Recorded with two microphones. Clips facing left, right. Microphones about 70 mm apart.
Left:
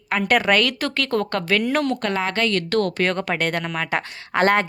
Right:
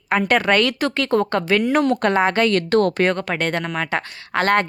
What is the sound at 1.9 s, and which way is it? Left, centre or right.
Speech, right.